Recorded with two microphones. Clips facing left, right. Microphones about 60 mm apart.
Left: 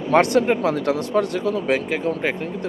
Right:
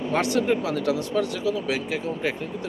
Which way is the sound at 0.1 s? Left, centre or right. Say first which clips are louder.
Left 7 dB; left.